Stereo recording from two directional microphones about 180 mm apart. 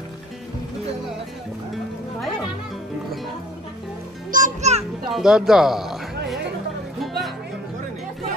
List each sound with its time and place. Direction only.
4.3 s music: 45° right (ahead or behind)
5.1 s speech: centre (ahead or behind)
7.0 s music: centre (ahead or behind)